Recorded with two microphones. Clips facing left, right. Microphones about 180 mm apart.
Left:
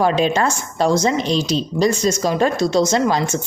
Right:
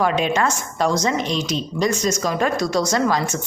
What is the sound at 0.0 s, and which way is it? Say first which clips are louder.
A woman's voice: left 3 dB; 30° left (ahead or behind).